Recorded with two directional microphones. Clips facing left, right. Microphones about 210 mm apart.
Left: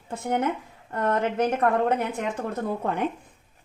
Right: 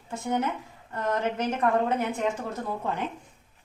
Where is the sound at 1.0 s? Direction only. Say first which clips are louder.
Left 4 dB; 55° left (ahead or behind).